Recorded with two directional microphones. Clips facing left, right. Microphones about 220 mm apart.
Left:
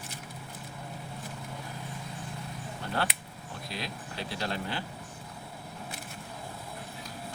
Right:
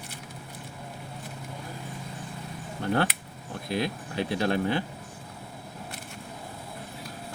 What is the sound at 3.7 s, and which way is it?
Speech, 55° right (ahead or behind).